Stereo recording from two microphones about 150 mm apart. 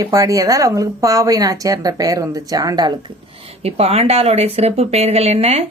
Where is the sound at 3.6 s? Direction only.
40° right (ahead or behind).